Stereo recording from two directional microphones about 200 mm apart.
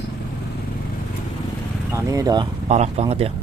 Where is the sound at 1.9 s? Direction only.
15° right (ahead or behind).